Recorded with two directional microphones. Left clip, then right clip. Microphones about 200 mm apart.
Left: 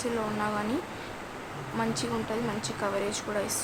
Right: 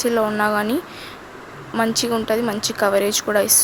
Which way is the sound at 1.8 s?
45° right (ahead or behind).